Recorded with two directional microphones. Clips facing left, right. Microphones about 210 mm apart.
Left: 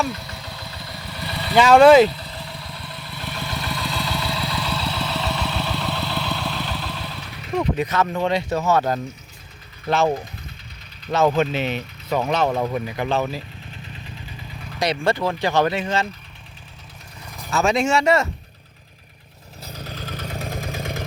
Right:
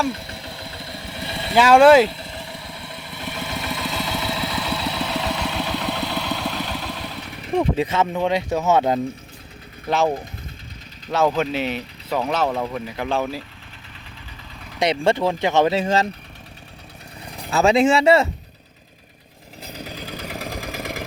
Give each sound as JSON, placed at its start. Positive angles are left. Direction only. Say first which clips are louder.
{"t": 0.1, "sound": "vehicle", "louder": "right 2 dB", "side_deg": -30}
{"t": 1.5, "sound": "speech", "louder": "left 1 dB", "side_deg": -5}
{"t": 2.0, "sound": "vehicle", "louder": "left 1 dB", "side_deg": -25}
{"t": 7.5, "sound": "speech", "louder": "right 2 dB", "side_deg": -30}
{"t": 8.1, "sound": "speech", "louder": "right 1 dB", "side_deg": -10}
{"t": 11.3, "sound": "speech", "louder": "left 1 dB", "side_deg": -5}
{"t": 12.5, "sound": "speech", "louder": "left 2 dB", "side_deg": 5}
{"t": 13.1, "sound": "speech", "louder": "right 1 dB", "side_deg": -5}
{"t": 14.8, "sound": "speech", "louder": "right 2 dB", "side_deg": -25}
{"t": 17.3, "sound": "speech", "louder": "right 3 dB", "side_deg": -30}
{"t": 19.7, "sound": "vehicle", "louder": "even", "side_deg": -15}